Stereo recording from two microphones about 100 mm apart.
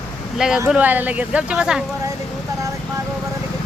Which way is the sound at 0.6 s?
15° right (ahead or behind).